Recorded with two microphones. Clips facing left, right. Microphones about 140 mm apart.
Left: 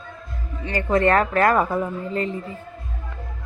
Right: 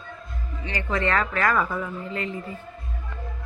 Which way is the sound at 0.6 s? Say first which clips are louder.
Left 7 dB; 50° left (ahead or behind).